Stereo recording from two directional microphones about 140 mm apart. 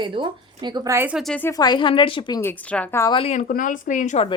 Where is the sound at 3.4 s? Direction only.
75° left (ahead or behind).